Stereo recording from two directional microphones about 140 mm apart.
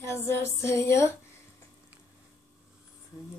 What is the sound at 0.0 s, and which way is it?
Female singing, 20° left (ahead or behind).